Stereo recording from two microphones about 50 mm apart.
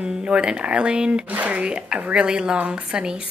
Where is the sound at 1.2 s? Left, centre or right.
Right; by 2.5 s centre.